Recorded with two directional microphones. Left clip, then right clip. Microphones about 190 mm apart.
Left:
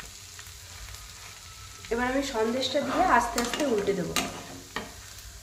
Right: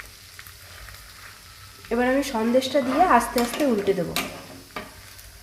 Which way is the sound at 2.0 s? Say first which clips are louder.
Right 4 dB; 55° right (ahead or behind).